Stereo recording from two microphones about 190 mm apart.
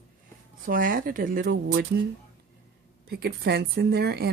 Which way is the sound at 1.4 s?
75° right (ahead or behind).